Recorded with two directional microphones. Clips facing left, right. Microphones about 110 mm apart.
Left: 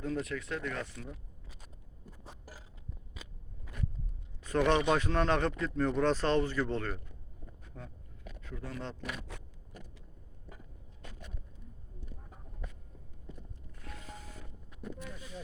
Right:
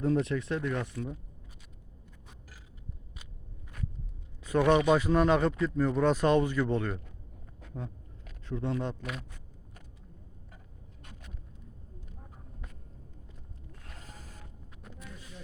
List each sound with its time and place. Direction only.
0.0 s speech: 30° right (ahead or behind)
4.4 s speech: 10° right (ahead or behind)
7.7 s a sound: 30° right (ahead or behind)
8.4 s speech: 25° right (ahead or behind)
9.3 s speech: 80° left